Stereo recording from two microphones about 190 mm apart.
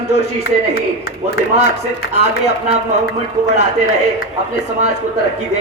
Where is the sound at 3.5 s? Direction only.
55° left (ahead or behind).